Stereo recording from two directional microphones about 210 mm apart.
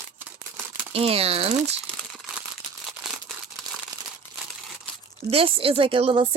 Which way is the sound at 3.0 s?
Centre (ahead or behind).